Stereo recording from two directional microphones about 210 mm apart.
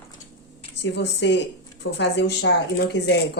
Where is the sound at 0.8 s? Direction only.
55° left (ahead or behind).